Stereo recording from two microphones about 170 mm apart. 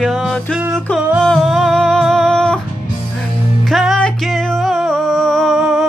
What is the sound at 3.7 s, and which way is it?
Music, centre (ahead or behind).